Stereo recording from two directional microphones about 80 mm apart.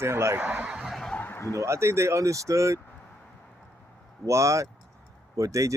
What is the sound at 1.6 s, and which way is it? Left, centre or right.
Speech, right.